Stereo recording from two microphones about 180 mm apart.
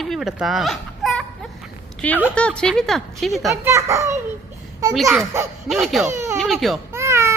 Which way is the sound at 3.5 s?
15° right (ahead or behind).